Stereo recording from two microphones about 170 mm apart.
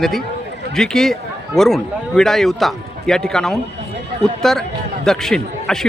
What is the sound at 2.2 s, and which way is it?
Speech, centre (ahead or behind).